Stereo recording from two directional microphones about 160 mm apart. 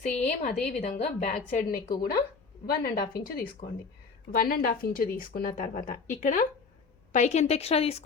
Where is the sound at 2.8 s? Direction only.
75° left (ahead or behind).